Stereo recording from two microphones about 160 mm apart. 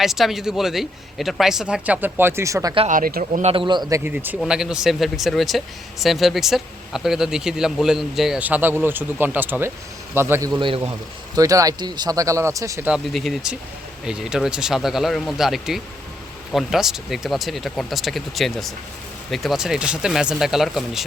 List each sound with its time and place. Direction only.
0.0 s speech: centre (ahead or behind); by 2.7 s 20° right (ahead or behind)
2.9 s speech: 55° right (ahead or behind)
3.4 s a man's voice: 35° right (ahead or behind); by 10.5 s 15° right (ahead or behind)
10.6 s a man's voice: 30° right (ahead or behind)
12.9 s speech: centre (ahead or behind)